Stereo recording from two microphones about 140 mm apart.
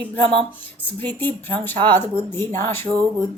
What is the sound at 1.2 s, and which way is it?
Speech, 15° left (ahead or behind).